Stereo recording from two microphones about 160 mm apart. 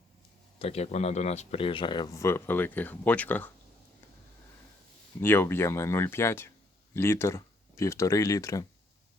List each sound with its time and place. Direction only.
0.6 s speech: 40° left (ahead or behind); by 3.5 s 10° left (ahead or behind)
5.2 s speech: 15° left (ahead or behind)